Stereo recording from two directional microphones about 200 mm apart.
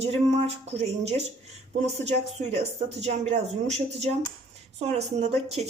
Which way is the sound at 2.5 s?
35° right (ahead or behind).